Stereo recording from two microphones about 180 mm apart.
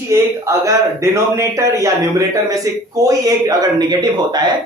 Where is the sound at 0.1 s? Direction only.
15° right (ahead or behind).